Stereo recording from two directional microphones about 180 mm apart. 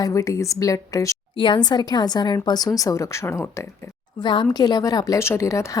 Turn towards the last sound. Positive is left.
turn(degrees=15)  # may be behind; listen again after turning